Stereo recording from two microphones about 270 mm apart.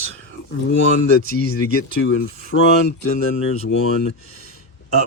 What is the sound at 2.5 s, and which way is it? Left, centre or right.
Speech, left.